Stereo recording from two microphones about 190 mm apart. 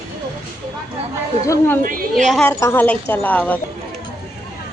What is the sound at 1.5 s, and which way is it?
Speech, 10° left (ahead or behind).